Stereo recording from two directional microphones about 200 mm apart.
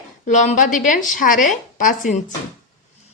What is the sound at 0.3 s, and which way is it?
A woman's voice, 40° left (ahead or behind).